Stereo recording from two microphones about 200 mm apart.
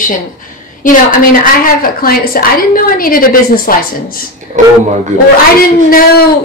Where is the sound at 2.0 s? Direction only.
45° left (ahead or behind).